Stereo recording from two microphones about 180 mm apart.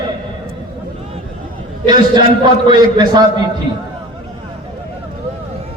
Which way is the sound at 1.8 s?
25° right (ahead or behind).